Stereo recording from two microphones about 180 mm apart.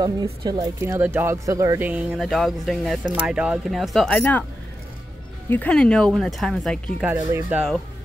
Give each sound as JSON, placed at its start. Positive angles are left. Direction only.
{"t": 0.0, "sound": "speech", "side_deg": -20}
{"t": 5.5, "sound": "speech", "side_deg": 5}
{"t": 7.1, "sound": "speech", "side_deg": -15}